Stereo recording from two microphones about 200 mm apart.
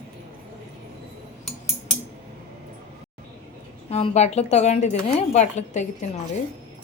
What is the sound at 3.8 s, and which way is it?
Speech, 30° left (ahead or behind).